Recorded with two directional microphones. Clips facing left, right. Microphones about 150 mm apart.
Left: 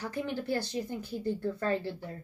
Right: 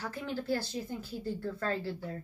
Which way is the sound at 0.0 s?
20° left (ahead or behind).